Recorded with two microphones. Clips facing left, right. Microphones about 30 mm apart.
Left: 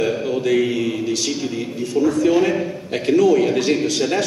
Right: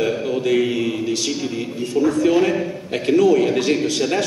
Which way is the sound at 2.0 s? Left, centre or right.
Right.